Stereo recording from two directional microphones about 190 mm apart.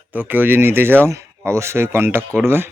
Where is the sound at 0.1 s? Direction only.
10° right (ahead or behind).